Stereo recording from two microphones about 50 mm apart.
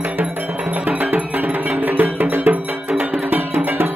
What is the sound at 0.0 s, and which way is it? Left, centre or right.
Cowbell, right.